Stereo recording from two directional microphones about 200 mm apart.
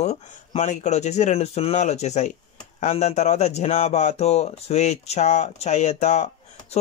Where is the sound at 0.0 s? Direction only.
35° left (ahead or behind).